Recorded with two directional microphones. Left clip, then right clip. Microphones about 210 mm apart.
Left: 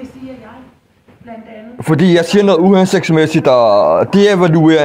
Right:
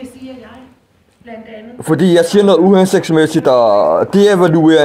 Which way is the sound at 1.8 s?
45° left (ahead or behind).